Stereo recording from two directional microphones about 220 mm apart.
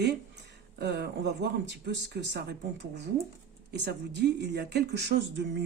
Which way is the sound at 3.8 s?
50° right (ahead or behind).